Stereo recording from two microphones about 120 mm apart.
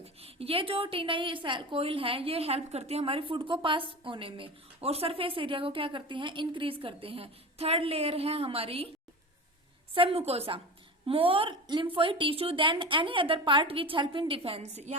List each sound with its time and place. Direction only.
0.0 s a woman's voice: 55° right (ahead or behind)
9.9 s a woman's voice: 50° right (ahead or behind)
14.6 s a woman's voice: 70° right (ahead or behind)